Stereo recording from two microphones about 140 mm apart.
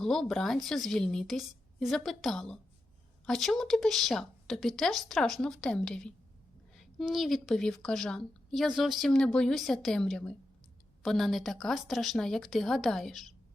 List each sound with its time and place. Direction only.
0.0 s a woman's voice: 5° left (ahead or behind)